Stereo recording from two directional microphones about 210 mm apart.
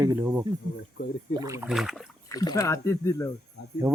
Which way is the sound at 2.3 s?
15° left (ahead or behind).